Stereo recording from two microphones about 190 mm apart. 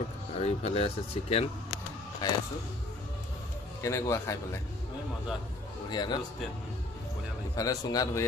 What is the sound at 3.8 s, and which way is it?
Speech, 15° left (ahead or behind).